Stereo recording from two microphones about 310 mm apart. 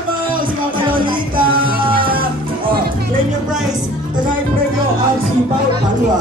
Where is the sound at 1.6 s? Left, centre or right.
Right.